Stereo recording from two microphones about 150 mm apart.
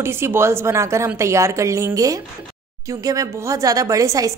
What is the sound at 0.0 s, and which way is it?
A woman's voice, 15° right (ahead or behind).